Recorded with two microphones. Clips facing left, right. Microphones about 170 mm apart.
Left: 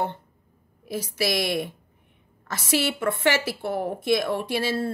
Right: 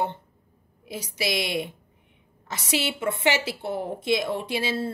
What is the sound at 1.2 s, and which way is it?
A woman's voice, 50° left (ahead or behind).